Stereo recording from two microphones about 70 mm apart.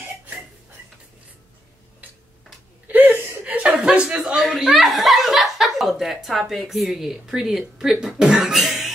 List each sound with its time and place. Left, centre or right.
2.9 s whimper: right
3.4 s chuckle: centre
6.5 s speech: centre